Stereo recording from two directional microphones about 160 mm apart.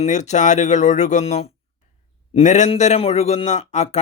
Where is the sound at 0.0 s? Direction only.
45° left (ahead or behind).